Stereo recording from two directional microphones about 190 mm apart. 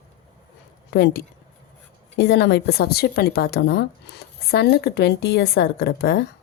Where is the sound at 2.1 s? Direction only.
65° left (ahead or behind).